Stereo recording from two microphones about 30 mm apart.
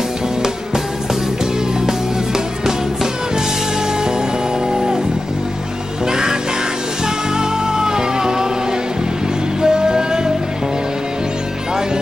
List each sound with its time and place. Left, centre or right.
7.3 s music: right
9.6 s music: right